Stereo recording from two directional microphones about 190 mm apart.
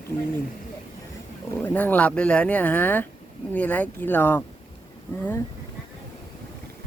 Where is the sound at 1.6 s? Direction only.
10° left (ahead or behind).